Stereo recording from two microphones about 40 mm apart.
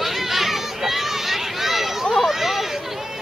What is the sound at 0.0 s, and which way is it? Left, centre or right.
Run, centre.